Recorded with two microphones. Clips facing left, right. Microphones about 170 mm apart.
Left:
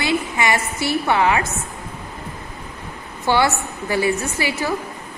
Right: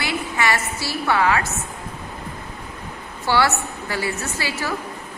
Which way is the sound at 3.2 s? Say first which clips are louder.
Left 2 dB; 20° left (ahead or behind).